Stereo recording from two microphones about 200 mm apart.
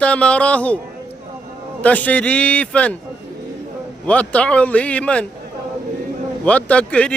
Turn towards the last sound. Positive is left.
turn(degrees=5)  # may be behind; listen again after turning